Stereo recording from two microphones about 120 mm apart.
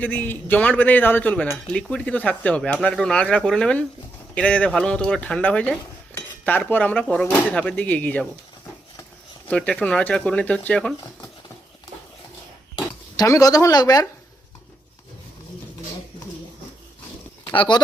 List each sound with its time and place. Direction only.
0.0 s speech: 15° left (ahead or behind)
6.1 s cutlery: 15° left (ahead or behind)
6.7 s speech: 15° left (ahead or behind)
9.5 s speech: 10° left (ahead or behind)
12.7 s speech: 30° left (ahead or behind)
17.4 s a sound: 40° left (ahead or behind)